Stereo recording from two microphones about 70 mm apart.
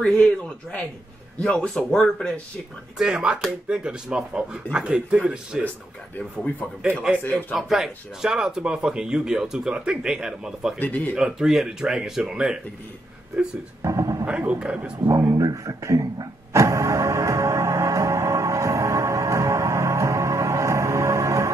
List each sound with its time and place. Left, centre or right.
0.0 s speech: centre
3.0 s speech: centre
7.2 s speech: left
7.5 s speech: centre
10.8 s speech: left
11.1 s speech: centre
13.8 s speech: right
14.2 s a man's voice: centre
15.3 s speech: right
16.6 s music: right